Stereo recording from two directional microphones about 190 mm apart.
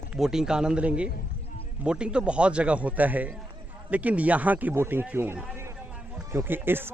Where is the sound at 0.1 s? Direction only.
5° right (ahead or behind).